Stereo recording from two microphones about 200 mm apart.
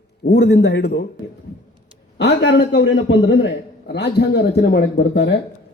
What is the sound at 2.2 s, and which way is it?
A man's voice, 60° left (ahead or behind).